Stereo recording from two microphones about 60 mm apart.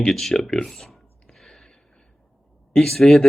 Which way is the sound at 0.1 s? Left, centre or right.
Centre.